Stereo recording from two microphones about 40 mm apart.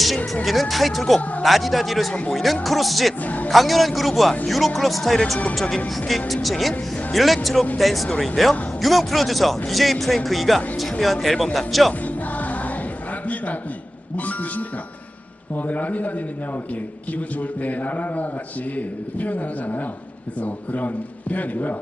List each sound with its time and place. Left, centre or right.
0.4 s a man's voice: centre
3.2 s a man's voice: left
3.5 s a man's voice: centre
12.0 s music: left
15.5 s a man's voice: left
17.6 s a man's voice: left